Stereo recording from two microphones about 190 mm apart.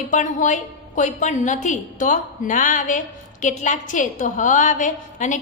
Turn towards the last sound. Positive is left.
turn(degrees=40)  # may be behind; listen again after turning